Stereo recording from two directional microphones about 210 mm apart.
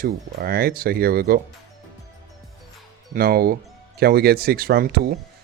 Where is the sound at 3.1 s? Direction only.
45° right (ahead or behind).